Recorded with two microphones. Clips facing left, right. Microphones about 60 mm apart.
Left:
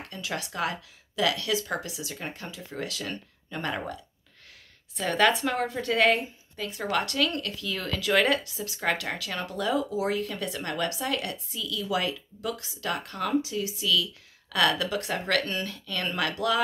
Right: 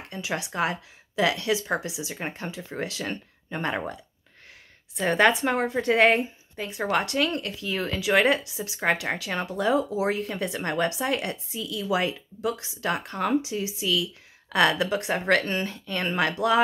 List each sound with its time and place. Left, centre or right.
0.1 s speech: right
2.1 s speech: right
5.0 s speech: right